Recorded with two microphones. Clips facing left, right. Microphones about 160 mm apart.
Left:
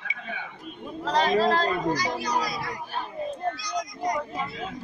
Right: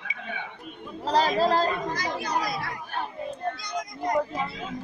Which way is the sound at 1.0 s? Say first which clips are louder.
Even; 35° right (ahead or behind).